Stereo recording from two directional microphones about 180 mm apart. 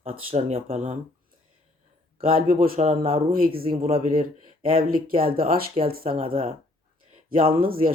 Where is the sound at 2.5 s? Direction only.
50° right (ahead or behind).